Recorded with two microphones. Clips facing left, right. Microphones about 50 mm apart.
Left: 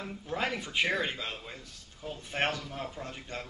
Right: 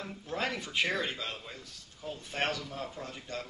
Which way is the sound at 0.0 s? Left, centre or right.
Centre.